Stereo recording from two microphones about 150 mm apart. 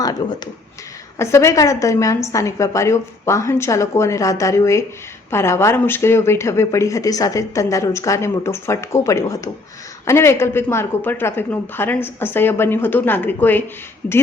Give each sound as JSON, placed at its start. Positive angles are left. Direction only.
{"t": 0.0, "sound": "a woman's voice", "side_deg": 25}